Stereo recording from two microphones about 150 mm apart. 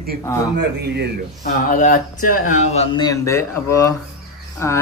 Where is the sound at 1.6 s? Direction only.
65° left (ahead or behind).